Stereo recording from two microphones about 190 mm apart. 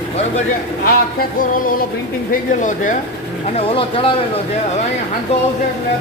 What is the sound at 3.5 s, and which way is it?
Speech, 30° left (ahead or behind).